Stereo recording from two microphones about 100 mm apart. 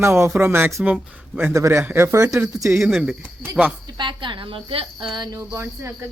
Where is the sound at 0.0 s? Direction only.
25° right (ahead or behind).